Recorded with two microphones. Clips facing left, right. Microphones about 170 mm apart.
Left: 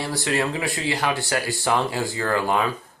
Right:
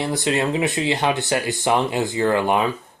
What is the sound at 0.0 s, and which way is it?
Speech, 20° right (ahead or behind).